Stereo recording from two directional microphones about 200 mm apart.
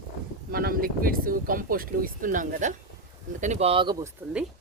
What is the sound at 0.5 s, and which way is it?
Speech, 45° right (ahead or behind).